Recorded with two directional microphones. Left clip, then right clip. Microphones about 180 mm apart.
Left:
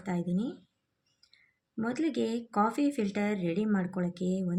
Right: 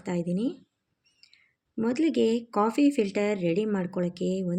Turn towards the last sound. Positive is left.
turn(degrees=-45)  # may be behind; listen again after turning